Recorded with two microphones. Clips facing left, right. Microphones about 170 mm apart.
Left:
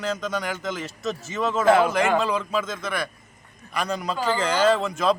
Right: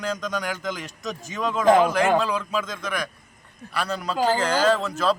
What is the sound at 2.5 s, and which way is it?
Speech, 5° left (ahead or behind).